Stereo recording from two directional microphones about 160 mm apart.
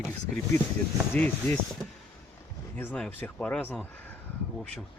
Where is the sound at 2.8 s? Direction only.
10° left (ahead or behind).